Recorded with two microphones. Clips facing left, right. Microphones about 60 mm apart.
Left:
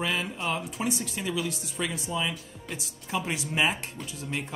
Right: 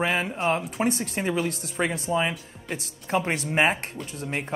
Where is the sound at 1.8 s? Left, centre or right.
Right.